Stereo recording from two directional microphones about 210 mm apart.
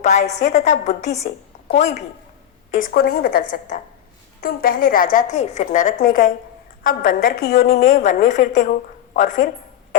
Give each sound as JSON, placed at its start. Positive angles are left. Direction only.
{"t": 0.0, "sound": "a woman's voice", "side_deg": 35}
{"t": 2.8, "sound": "a woman's voice", "side_deg": 45}
{"t": 7.8, "sound": "a woman's voice", "side_deg": 35}